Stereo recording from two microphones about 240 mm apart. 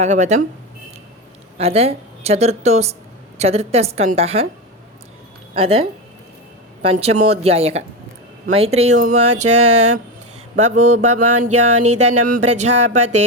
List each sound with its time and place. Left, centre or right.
0.0 s a woman's voice: right
1.5 s a woman's voice: right
5.5 s a woman's voice: right
9.2 s music: right
10.6 s a woman's voice: right
11.2 s music: right
12.5 s a woman's voice: right